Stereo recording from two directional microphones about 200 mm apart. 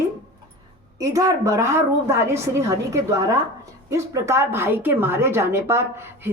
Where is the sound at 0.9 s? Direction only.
15° right (ahead or behind).